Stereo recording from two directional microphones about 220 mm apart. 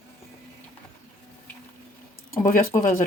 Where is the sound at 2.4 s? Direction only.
40° left (ahead or behind).